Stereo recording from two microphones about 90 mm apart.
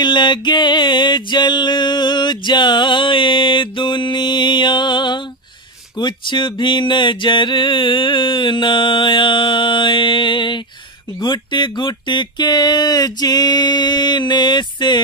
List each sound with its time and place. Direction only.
0.0 s music: 60° left (ahead or behind)
11.1 s speech: 55° left (ahead or behind)